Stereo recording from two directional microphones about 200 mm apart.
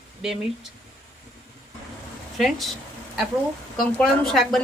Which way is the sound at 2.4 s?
Centre (ahead or behind).